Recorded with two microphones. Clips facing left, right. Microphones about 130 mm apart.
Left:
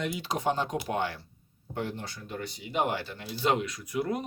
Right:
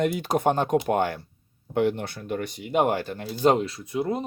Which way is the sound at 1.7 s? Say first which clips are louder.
Right 11 dB; 65° right (ahead or behind).